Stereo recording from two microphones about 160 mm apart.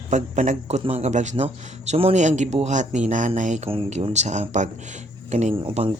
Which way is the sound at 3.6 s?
35° right (ahead or behind).